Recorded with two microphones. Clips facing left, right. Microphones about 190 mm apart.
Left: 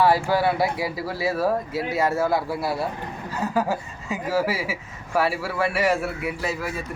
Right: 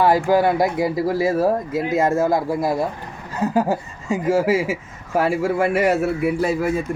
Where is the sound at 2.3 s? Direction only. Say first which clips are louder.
Right 4 dB; 15° right (ahead or behind).